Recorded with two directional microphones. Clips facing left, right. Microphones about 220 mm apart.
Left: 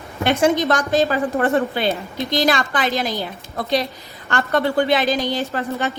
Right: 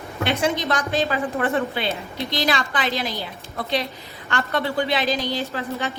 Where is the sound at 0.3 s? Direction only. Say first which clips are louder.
Left 6 dB; 45° left (ahead or behind).